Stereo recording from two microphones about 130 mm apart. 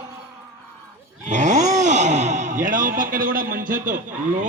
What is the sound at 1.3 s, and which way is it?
Speech, 70° right (ahead or behind).